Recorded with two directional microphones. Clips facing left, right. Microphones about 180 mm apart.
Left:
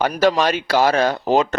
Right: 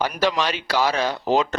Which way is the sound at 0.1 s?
45° left (ahead or behind).